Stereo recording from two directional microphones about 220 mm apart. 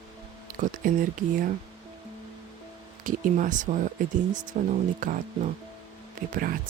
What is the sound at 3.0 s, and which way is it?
Speech, 35° right (ahead or behind).